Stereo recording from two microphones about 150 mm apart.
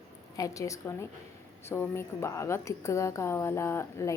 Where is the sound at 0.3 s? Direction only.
20° left (ahead or behind).